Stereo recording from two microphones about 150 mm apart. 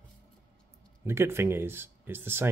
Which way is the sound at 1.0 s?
15° right (ahead or behind).